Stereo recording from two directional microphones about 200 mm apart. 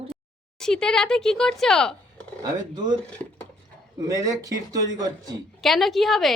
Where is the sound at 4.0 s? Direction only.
15° right (ahead or behind).